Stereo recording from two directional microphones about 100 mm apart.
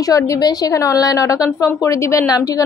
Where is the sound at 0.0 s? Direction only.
35° left (ahead or behind).